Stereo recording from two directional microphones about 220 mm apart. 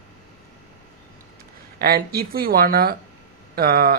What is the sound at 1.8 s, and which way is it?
Speech, 45° right (ahead or behind).